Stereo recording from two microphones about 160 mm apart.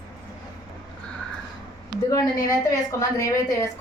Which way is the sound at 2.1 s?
20° left (ahead or behind).